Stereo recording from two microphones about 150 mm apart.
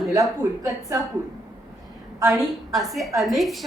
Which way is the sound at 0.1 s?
20° right (ahead or behind).